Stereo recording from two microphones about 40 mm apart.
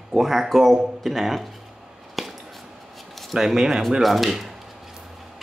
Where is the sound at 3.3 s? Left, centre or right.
Centre.